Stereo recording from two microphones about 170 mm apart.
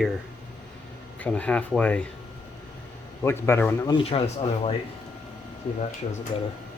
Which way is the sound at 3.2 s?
15° left (ahead or behind).